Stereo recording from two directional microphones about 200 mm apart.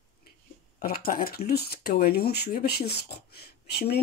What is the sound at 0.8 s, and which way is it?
Speech, 50° left (ahead or behind).